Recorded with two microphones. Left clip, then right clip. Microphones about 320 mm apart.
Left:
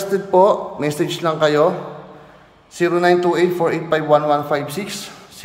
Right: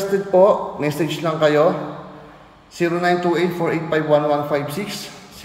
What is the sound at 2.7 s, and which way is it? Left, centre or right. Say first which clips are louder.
A man's voice: left 3 dB; centre.